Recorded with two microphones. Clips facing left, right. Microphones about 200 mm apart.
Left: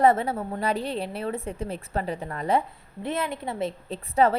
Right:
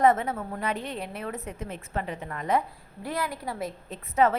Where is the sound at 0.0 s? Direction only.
30° left (ahead or behind).